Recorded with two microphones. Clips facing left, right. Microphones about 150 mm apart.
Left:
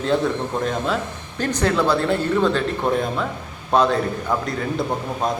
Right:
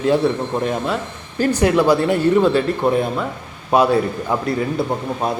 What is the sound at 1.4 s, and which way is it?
Speech, 10° right (ahead or behind).